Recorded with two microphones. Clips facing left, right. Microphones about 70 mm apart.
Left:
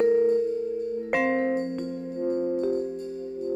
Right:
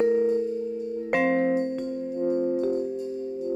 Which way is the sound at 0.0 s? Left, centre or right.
Centre.